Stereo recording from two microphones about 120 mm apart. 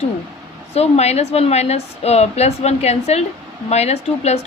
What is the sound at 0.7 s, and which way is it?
A woman's voice, 60° left (ahead or behind).